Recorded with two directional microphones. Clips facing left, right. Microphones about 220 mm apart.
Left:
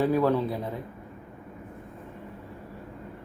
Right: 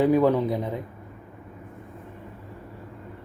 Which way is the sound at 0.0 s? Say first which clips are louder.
Right 4 dB; 15° right (ahead or behind).